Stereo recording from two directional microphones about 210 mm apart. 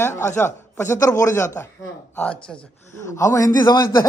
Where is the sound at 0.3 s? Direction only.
10° left (ahead or behind).